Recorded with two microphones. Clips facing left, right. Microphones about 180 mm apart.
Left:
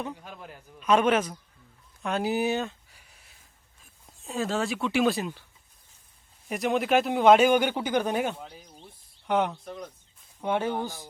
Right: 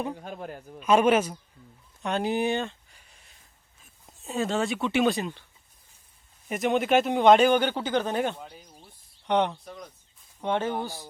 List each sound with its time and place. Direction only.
0.1 s a man's voice: 40° right (ahead or behind)
0.8 s a man's voice: 10° right (ahead or behind)
2.0 s a sound: centre (ahead or behind)
4.2 s speech: centre (ahead or behind)
6.5 s speech: centre (ahead or behind)